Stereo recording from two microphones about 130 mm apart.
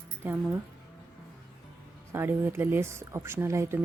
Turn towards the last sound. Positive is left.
turn(degrees=-20)  # may be behind; listen again after turning